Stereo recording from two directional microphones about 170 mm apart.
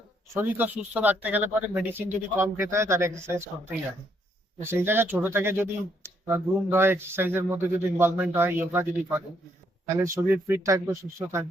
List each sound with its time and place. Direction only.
0.3 s speech: 10° right (ahead or behind)
4.6 s speech: 15° right (ahead or behind)